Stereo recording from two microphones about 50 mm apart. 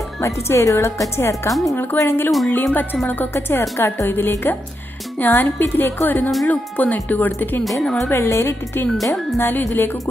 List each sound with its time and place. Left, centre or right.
0.2 s speech: left
1.5 s speech: centre
2.0 s a woman's voice: left
3.7 s speech: left
4.1 s a woman's voice: left
8.1 s speech: left
8.9 s speech: centre
9.4 s a woman's voice: left